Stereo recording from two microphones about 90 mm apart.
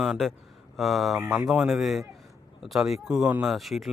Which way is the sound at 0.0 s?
Centre (ahead or behind).